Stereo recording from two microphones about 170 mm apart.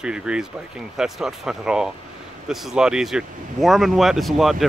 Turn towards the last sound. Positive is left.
turn(degrees=0)  # may be behind; listen again after turning